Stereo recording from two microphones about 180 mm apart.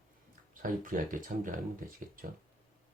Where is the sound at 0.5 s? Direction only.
50° right (ahead or behind).